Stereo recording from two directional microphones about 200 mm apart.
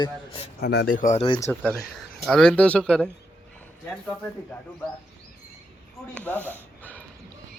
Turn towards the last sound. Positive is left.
turn(degrees=10)  # may be behind; listen again after turning